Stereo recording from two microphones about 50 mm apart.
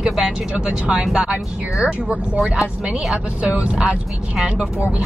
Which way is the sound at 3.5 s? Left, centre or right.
Right.